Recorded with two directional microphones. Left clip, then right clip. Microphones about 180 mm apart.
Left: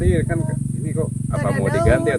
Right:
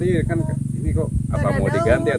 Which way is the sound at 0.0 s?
15° right (ahead or behind).